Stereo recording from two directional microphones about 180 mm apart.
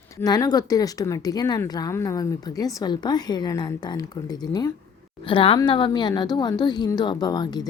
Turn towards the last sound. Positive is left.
turn(degrees=20)  # may be behind; listen again after turning